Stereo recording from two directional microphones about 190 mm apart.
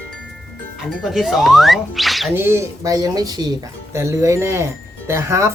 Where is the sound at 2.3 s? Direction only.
15° right (ahead or behind).